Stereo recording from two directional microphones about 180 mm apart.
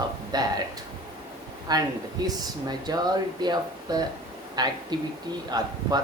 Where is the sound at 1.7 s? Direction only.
20° right (ahead or behind).